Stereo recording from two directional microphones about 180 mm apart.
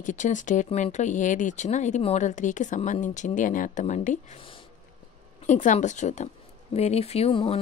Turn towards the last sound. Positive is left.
turn(degrees=30)  # may be behind; listen again after turning